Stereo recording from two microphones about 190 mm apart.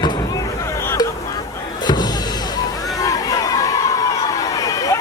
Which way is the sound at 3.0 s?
20° left (ahead or behind).